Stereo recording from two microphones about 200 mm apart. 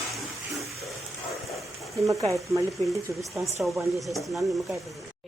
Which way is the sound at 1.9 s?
15° right (ahead or behind).